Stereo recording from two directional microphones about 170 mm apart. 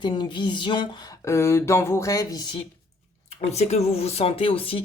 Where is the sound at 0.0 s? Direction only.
25° left (ahead or behind).